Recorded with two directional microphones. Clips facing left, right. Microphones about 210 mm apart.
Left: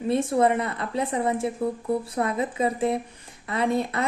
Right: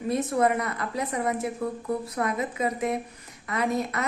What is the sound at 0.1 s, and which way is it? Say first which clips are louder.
A woman's voice: left 3 dB; 30° left (ahead or behind).